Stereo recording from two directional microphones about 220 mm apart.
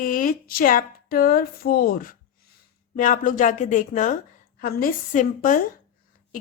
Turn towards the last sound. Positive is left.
turn(degrees=35)  # may be behind; listen again after turning